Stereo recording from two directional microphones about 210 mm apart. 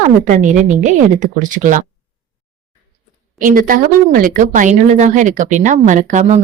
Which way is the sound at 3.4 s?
40° right (ahead or behind).